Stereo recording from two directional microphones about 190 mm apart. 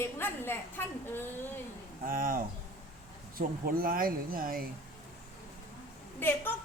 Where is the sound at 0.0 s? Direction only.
10° left (ahead or behind).